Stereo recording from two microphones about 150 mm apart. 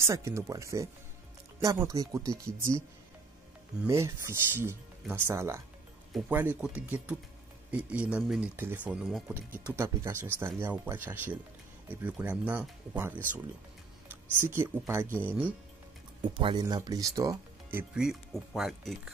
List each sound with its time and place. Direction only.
0.0 s speech: 20° right (ahead or behind)
3.8 s speech: 20° right (ahead or behind)
9.8 s speech: 15° right (ahead or behind)
14.4 s speech: 15° right (ahead or behind)
16.3 s speech: 35° right (ahead or behind); by 18.9 s centre (ahead or behind)